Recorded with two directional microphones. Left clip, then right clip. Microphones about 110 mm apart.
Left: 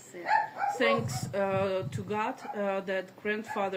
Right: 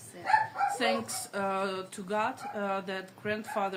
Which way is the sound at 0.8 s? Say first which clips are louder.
Left 3 dB; 30° right (ahead or behind).